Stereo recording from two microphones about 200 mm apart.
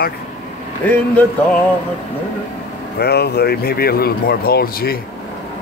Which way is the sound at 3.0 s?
55° left (ahead or behind).